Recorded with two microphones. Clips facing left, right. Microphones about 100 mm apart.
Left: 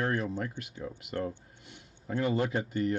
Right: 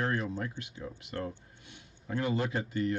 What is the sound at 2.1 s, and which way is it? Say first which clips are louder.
Speech: left 2 dB; 45° left (ahead or behind).